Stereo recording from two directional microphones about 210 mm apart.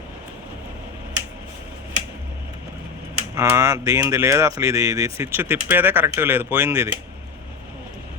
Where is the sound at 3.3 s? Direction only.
15° right (ahead or behind).